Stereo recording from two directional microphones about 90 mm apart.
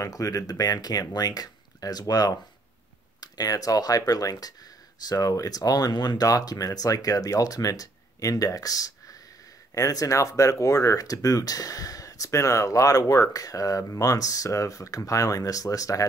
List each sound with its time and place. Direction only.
0.0 s speech: 40° left (ahead or behind)